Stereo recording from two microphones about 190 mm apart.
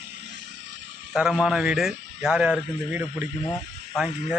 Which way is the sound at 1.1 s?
5° right (ahead or behind).